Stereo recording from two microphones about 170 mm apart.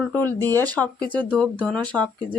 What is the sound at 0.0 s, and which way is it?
Speech, 10° left (ahead or behind).